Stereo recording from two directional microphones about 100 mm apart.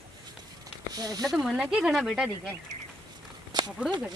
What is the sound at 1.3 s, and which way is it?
Speech, 5° right (ahead or behind).